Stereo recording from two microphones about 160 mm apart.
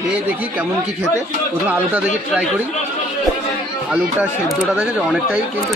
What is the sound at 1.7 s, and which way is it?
Speech, 10° right (ahead or behind).